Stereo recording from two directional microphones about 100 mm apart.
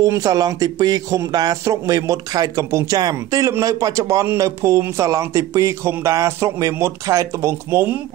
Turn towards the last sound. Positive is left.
turn(degrees=-25)  # may be behind; listen again after turning